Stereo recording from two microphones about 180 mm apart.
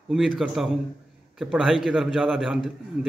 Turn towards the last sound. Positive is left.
turn(degrees=0)  # may be behind; listen again after turning